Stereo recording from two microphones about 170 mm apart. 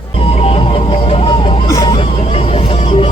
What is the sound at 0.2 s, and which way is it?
Music, 35° left (ahead or behind).